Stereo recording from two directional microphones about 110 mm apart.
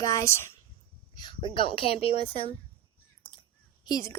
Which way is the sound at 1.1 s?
45° left (ahead or behind).